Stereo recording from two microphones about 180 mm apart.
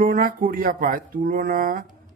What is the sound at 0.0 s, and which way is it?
A man's voice, 50° right (ahead or behind).